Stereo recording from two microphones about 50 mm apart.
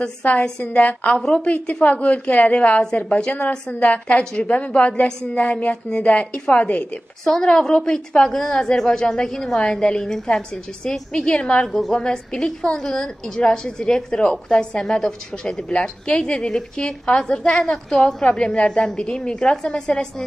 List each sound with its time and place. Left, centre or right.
0.2 s a woman's voice: left
7.2 s a woman's voice: centre
8.2 s a woman's voice: centre
11.7 s a woman's voice: centre
12.0 s a woman's voice: centre